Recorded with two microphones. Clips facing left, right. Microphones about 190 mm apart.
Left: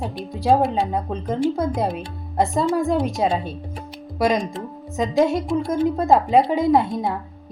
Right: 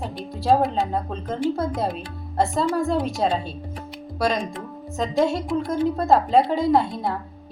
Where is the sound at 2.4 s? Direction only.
15° left (ahead or behind).